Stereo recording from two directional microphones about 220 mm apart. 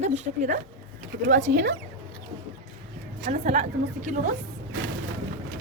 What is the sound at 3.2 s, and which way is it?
A woman's voice, 35° right (ahead or behind).